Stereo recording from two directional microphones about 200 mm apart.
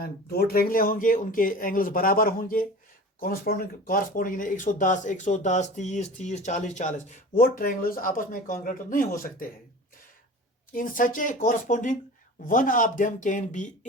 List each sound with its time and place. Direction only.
0.0 s speech: 50° left (ahead or behind)
10.7 s speech: 45° left (ahead or behind)